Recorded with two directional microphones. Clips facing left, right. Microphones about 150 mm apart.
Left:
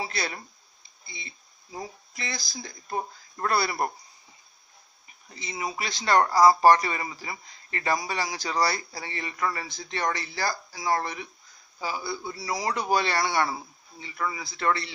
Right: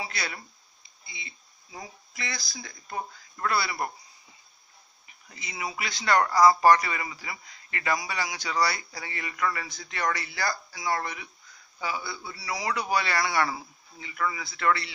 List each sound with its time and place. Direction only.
0.0 s a sound: 35° left (ahead or behind)
1.0 s speech: 35° left (ahead or behind)
3.5 s speech: 45° left (ahead or behind)
5.3 s a man's voice: 25° left (ahead or behind)